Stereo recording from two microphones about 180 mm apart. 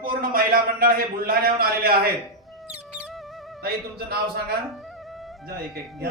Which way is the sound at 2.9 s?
5° right (ahead or behind).